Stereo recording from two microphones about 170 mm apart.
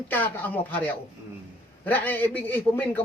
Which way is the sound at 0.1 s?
10° left (ahead or behind).